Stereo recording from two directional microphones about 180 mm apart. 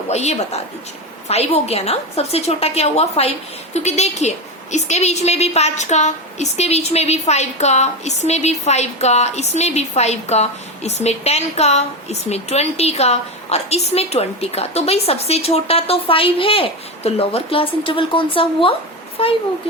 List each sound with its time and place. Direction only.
0.1 s a woman's voice: 35° left (ahead or behind)